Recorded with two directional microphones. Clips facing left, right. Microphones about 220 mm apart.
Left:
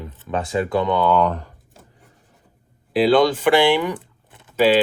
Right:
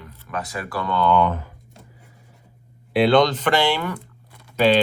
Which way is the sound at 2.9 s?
5° left (ahead or behind).